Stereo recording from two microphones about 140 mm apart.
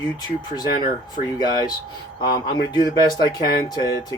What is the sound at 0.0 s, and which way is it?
Speech, 30° left (ahead or behind).